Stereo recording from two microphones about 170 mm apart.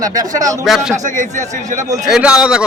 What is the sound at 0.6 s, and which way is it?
Speech, 5° right (ahead or behind).